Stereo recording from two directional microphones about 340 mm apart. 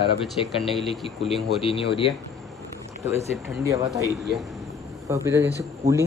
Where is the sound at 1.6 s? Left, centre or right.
Centre.